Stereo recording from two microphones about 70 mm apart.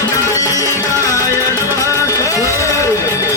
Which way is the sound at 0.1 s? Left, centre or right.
Left.